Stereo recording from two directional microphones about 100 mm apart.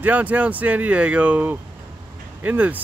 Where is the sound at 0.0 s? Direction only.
15° right (ahead or behind).